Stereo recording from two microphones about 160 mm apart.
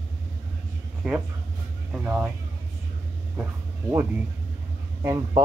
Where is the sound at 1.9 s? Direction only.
5° right (ahead or behind).